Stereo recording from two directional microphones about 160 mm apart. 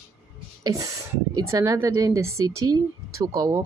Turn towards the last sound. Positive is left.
turn(degrees=-20)  # may be behind; listen again after turning